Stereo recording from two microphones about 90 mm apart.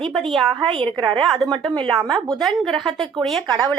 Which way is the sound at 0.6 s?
75° right (ahead or behind).